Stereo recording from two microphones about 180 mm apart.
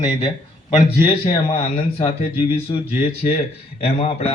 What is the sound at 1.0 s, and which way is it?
A man's voice, 30° left (ahead or behind).